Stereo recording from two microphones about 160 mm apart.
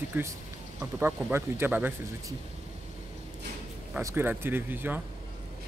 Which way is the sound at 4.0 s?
15° right (ahead or behind).